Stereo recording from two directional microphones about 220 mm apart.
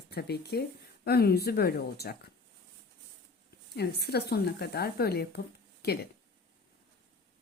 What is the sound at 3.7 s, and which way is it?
A woman's voice, 45° left (ahead or behind).